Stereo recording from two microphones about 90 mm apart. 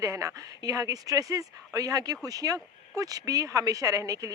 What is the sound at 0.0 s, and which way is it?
Speech, 35° right (ahead or behind).